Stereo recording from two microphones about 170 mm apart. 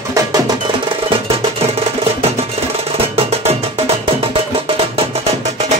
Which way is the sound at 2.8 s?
35° right (ahead or behind).